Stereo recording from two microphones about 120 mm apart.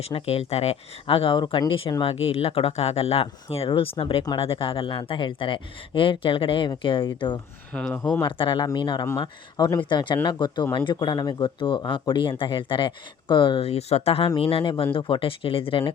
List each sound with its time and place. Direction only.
0.0 s speech: 55° left (ahead or behind)
7.7 s speech: 5° left (ahead or behind)
8.2 s speech: 45° left (ahead or behind)